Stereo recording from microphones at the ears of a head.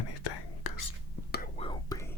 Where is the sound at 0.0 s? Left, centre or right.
Left.